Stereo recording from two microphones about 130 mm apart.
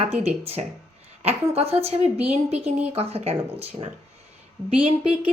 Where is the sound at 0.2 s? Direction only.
50° right (ahead or behind).